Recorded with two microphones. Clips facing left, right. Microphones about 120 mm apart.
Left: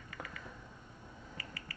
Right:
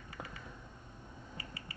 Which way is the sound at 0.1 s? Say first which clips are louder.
Even; 30° right (ahead or behind).